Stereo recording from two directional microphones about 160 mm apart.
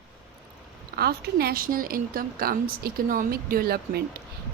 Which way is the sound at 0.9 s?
75° right (ahead or behind).